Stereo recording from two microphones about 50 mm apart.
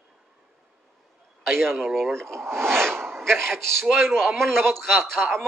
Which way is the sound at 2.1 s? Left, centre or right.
Right.